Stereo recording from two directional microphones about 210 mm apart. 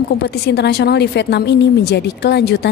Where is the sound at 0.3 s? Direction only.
55° left (ahead or behind).